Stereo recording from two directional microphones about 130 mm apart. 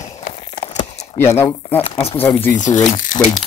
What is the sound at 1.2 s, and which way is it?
Speech, 20° left (ahead or behind).